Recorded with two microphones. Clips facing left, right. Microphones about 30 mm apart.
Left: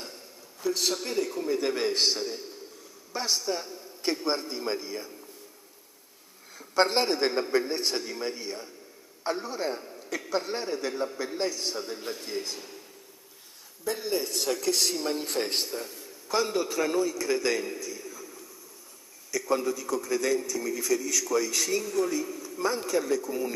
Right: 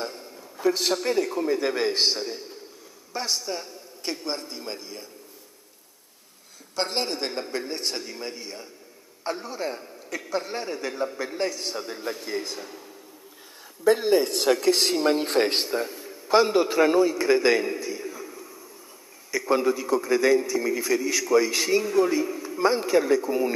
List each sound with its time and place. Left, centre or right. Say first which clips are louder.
0.0 s a sound: right 9 dB; right
1.0 s speech: right 5 dB; right
1.4 s a man's voice: right 3 dB; centre
6.7 s a man's voice: left 4 dB; centre
13.8 s a man's voice: right 10 dB; right